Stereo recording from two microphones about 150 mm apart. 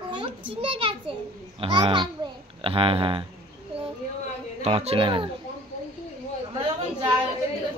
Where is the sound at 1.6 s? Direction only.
35° right (ahead or behind).